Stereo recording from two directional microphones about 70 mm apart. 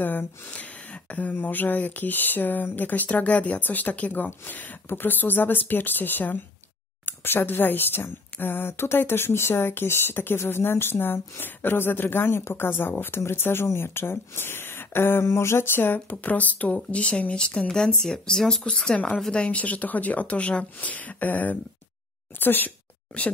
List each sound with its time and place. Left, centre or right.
0.0 s a woman's voice: left; by 18.9 s centre
18.9 s speech: centre